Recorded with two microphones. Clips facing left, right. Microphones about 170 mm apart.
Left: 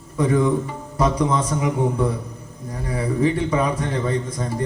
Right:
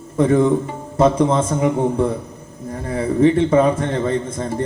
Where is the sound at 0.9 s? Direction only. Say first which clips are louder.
Right 5 dB; 25° right (ahead or behind).